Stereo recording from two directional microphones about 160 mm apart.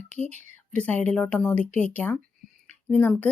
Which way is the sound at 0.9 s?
10° left (ahead or behind).